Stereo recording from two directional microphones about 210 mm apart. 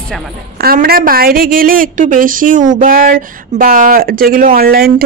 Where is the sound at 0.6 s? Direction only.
45° right (ahead or behind).